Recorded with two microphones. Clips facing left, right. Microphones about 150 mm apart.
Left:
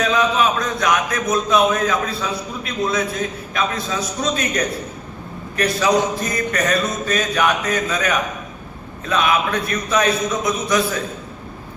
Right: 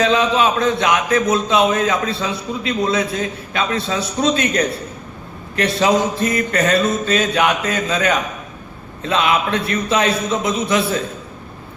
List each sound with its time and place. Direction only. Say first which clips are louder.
0.0 s a man's voice: right 2 dB; 30° right (ahead or behind)